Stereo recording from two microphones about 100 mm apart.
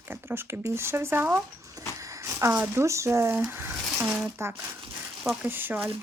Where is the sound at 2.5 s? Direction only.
30° right (ahead or behind).